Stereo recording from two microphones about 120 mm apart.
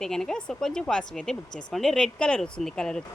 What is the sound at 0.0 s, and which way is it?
A woman's voice, 5° left (ahead or behind).